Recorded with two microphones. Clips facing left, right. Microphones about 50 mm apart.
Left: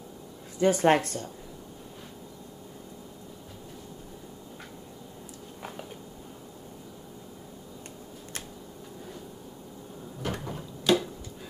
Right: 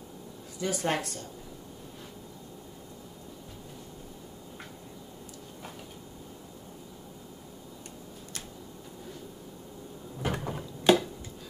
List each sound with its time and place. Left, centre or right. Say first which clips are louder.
0.6 s speech: left 9 dB; left
10.2 s door: right 2 dB; centre